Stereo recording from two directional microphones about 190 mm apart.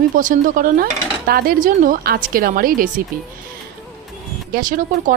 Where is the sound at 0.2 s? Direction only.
45° right (ahead or behind).